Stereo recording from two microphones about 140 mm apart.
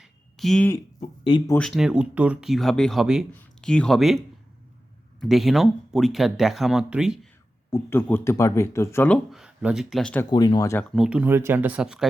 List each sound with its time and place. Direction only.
0.0 s a sound: centre (ahead or behind)
1.5 s speech: centre (ahead or behind)
5.2 s speech: centre (ahead or behind)
7.7 s speech: 15° left (ahead or behind)
9.3 s speech: 5° right (ahead or behind)
10.2 s speech: 30° left (ahead or behind)
10.9 s speech: 5° right (ahead or behind)